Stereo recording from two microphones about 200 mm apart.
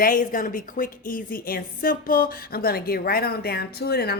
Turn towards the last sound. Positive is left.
turn(degrees=55)  # may be behind; listen again after turning